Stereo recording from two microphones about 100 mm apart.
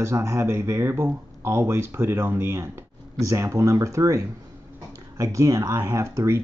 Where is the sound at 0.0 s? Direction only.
30° right (ahead or behind).